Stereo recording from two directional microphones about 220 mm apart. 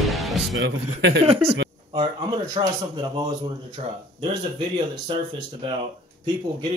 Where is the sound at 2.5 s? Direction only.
20° right (ahead or behind).